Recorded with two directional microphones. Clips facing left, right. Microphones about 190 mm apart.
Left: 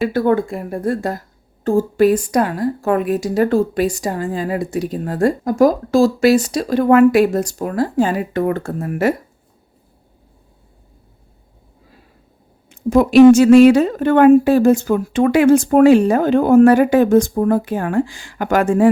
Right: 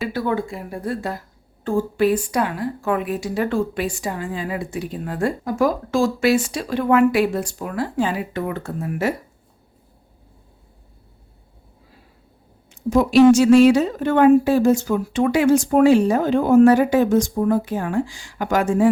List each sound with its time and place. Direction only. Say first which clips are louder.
0.1 s a woman's voice: left 7 dB; 50° left (ahead or behind)
12.7 s a woman's voice: left 4 dB; 55° left (ahead or behind)